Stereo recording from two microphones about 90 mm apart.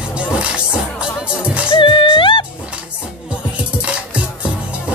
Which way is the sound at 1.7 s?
70° left (ahead or behind).